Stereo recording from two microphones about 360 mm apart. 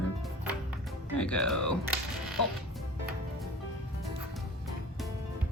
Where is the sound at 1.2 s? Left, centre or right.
Centre.